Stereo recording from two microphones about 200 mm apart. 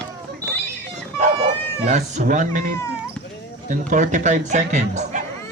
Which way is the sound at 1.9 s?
40° right (ahead or behind).